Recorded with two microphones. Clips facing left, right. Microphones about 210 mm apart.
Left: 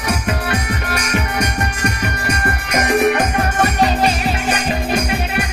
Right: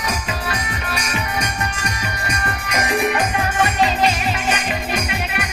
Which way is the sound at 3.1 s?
40° left (ahead or behind).